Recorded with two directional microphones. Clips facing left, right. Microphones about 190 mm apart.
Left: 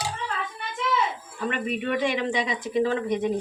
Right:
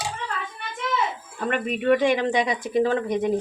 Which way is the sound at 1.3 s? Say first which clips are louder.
Right 2 dB; 50° right (ahead or behind).